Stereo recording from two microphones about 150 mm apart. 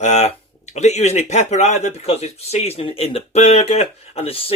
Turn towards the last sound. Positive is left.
turn(degrees=40)  # may be behind; listen again after turning